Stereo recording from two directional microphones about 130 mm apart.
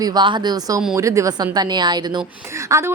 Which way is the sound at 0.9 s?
25° right (ahead or behind).